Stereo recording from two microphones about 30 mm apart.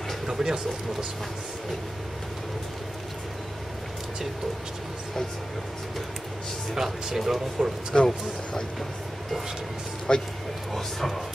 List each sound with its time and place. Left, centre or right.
0.3 s a sound: centre
6.7 s speech: centre
7.9 s a man's voice: centre
10.1 s speech: left
10.7 s speech: centre